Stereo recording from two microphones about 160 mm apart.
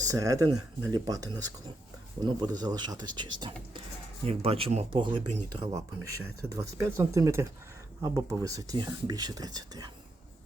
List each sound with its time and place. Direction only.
0.0 s speech: 20° right (ahead or behind)